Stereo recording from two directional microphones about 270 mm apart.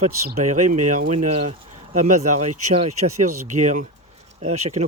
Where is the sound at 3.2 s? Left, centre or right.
Right.